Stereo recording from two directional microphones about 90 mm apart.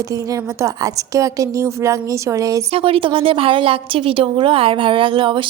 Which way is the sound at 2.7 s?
90° right.